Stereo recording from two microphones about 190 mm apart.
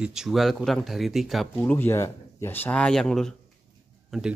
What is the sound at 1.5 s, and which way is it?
Speech, 10° left (ahead or behind).